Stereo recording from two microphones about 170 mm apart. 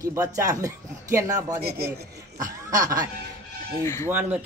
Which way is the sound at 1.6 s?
70° right (ahead or behind).